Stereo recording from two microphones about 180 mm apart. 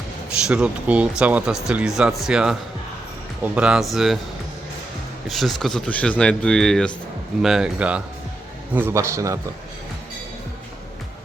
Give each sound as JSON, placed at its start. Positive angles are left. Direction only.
{"t": 0.4, "sound": "speech", "side_deg": -5}
{"t": 5.3, "sound": "speech", "side_deg": 0}